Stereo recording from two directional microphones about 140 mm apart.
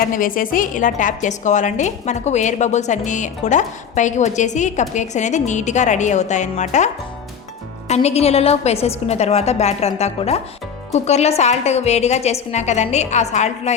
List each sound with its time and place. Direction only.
0.0 s a woman's voice: 80° left; by 13.7 s 55° left (ahead or behind)